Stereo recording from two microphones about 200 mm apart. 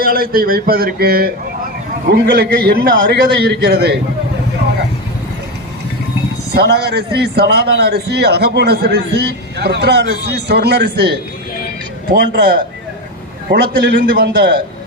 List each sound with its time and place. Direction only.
0.0 s a man's voice: 45° right (ahead or behind)
6.5 s a man's voice: 55° right (ahead or behind)